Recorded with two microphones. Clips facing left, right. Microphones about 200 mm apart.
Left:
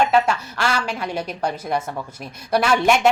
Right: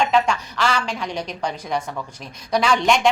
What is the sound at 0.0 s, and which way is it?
A woman's voice, 5° left (ahead or behind).